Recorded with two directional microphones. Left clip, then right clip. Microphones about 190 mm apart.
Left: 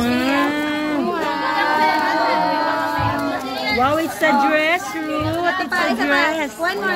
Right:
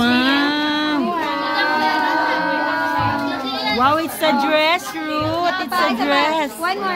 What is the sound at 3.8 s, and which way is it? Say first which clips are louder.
Chatter: right 1 dB; 30° right (ahead or behind).